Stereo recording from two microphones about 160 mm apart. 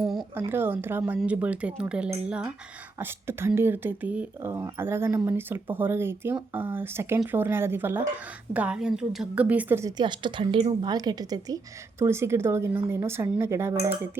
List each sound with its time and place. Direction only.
0.0 s speech: centre (ahead or behind)
0.3 s speech: 15° right (ahead or behind)
10.0 s a woman's voice: 30° right (ahead or behind)